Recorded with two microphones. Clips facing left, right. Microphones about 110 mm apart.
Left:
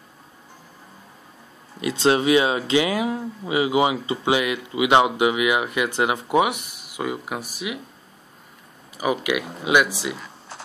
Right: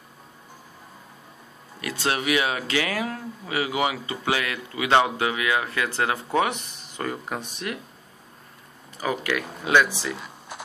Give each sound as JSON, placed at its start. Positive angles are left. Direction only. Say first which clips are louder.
{"t": 1.8, "sound": "speech", "louder": "left 8 dB", "side_deg": 20}
{"t": 8.9, "sound": "speech", "louder": "left 3 dB", "side_deg": 15}